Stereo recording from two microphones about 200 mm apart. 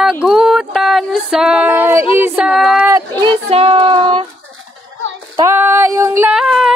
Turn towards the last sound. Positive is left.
turn(degrees=0)  # may be behind; listen again after turning